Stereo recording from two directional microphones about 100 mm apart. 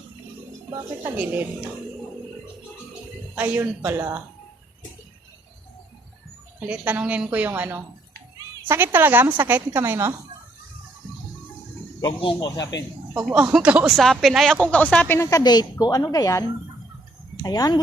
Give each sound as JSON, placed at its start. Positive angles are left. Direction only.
{"t": 0.7, "sound": "speech", "side_deg": -35}
{"t": 1.1, "sound": "a woman's voice", "side_deg": -15}
{"t": 3.3, "sound": "a woman's voice", "side_deg": -15}
{"t": 6.7, "sound": "a woman's voice", "side_deg": -15}
{"t": 13.1, "sound": "a woman's voice", "side_deg": -10}
{"t": 13.9, "sound": "speech", "side_deg": 0}
{"t": 14.7, "sound": "speech", "side_deg": 15}
{"t": 15.3, "sound": "speech", "side_deg": 40}
{"t": 17.4, "sound": "speech", "side_deg": 40}